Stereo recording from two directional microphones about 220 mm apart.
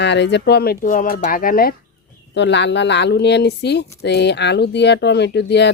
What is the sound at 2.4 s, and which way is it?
Speech, 55° left (ahead or behind).